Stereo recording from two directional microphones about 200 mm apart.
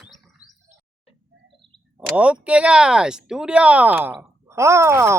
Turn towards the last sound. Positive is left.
turn(degrees=-15)  # may be behind; listen again after turning